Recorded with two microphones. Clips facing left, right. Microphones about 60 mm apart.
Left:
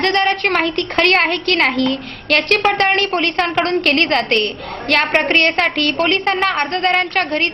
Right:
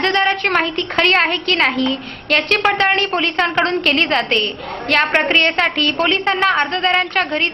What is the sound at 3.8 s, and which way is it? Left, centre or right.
A woman's voice, left.